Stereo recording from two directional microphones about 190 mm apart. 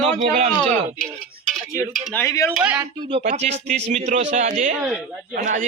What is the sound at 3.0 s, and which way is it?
Speech, 30° right (ahead or behind).